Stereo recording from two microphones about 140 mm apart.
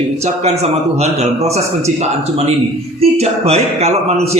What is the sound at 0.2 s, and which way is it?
A man's voice, 50° right (ahead or behind).